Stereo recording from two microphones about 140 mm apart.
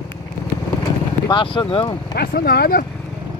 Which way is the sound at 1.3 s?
35° left (ahead or behind).